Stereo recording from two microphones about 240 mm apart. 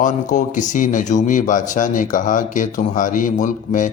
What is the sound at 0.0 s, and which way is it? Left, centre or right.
Speech, left.